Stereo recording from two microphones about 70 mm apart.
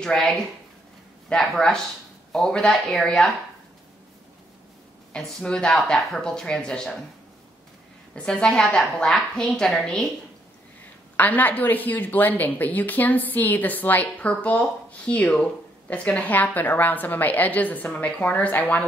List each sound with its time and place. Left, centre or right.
0.0 s a woman's voice: centre
1.4 s a woman's voice: centre
5.1 s a woman's voice: centre
8.1 s a woman's voice: centre
11.1 s a woman's voice: left